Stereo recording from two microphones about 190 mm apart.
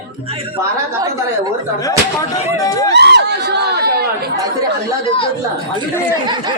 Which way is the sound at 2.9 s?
65° right (ahead or behind).